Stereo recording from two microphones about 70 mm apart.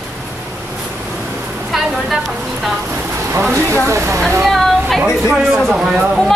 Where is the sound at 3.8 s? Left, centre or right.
Right.